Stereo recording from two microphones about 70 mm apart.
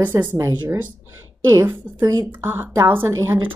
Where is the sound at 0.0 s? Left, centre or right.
Right.